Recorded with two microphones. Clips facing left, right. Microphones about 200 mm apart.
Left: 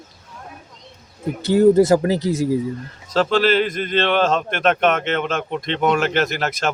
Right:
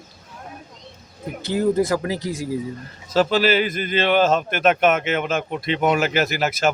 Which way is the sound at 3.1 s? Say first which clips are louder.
Left 1 dB; 5° right (ahead or behind).